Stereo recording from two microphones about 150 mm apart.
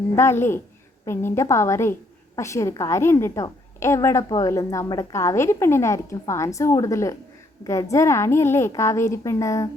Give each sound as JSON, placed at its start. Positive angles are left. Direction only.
{"t": 0.2, "sound": "a woman's voice", "side_deg": 15}